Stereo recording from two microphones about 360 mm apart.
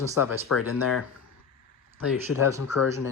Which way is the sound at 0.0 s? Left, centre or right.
Centre.